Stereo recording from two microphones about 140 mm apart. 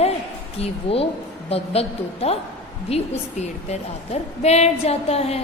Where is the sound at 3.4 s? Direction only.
50° left (ahead or behind).